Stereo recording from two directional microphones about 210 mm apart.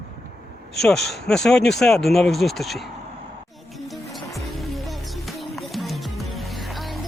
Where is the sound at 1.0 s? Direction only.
50° left (ahead or behind).